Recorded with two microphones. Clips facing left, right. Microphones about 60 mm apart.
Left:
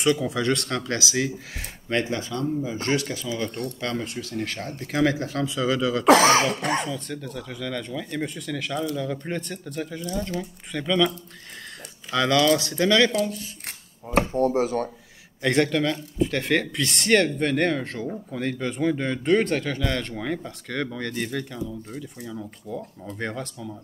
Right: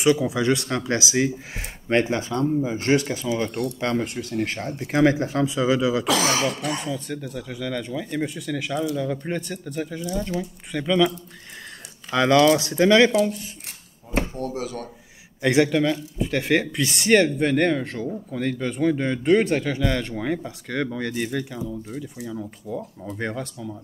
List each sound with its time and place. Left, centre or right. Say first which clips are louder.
0.0 s speech: right 3 dB; centre
6.0 s cough: left 6 dB; left
6.9 s speech: right 2 dB; centre
12.1 s speech: right 3 dB; right
14.3 s cough: left 7 dB; left
15.4 s speech: right 3 dB; centre
22.0 s speech: right 3 dB; centre